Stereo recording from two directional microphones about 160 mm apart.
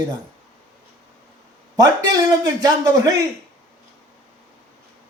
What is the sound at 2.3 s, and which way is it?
Speech, 25° right (ahead or behind).